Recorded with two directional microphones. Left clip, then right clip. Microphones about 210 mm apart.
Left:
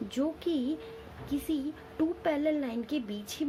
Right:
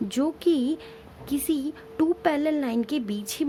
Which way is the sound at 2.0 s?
45° right (ahead or behind).